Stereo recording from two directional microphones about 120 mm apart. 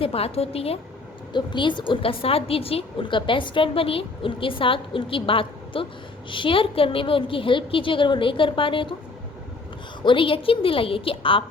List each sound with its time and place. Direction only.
0.0 s a woman's voice: 55° left (ahead or behind)
1.3 s a woman's voice: 40° left (ahead or behind)
10.0 s a woman's voice: 45° left (ahead or behind)